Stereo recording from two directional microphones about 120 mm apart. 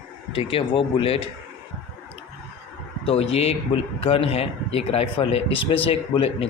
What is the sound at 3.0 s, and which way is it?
Speech, 55° left (ahead or behind).